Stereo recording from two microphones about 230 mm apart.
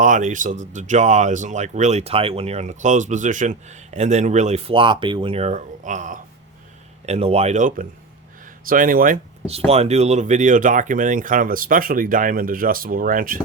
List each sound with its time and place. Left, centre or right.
0.0 s speech: right